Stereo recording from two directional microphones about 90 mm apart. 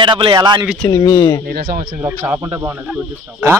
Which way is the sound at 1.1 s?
35° left (ahead or behind).